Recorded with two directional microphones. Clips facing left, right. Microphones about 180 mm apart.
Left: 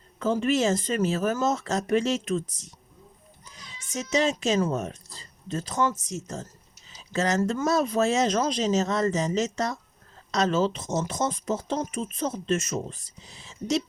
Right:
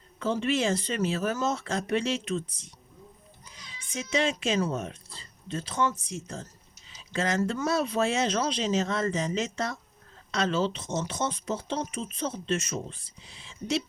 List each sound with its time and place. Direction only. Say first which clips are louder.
0.2 s speech: left 3 dB; 45° left (ahead or behind)
3.9 s speech: left 3 dB; 40° left (ahead or behind)